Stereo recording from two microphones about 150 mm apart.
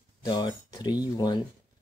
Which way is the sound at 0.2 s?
25° left (ahead or behind).